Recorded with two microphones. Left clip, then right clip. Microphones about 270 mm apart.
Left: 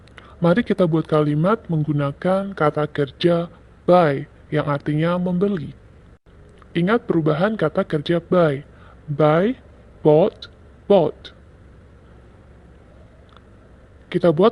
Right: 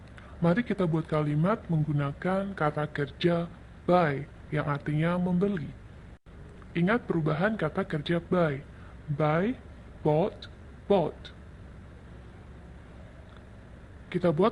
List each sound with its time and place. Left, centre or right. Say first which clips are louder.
0.2 s speech: left 9 dB; left
6.7 s speech: left 9 dB; left
14.1 s speech: left 10 dB; left